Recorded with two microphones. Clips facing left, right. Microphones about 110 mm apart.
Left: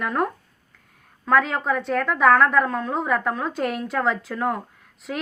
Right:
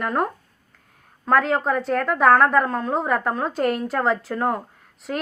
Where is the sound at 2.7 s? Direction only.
30° right (ahead or behind).